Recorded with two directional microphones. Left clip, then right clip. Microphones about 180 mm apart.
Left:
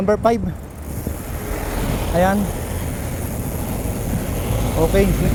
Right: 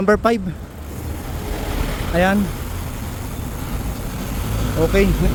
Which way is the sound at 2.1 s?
15° right (ahead or behind).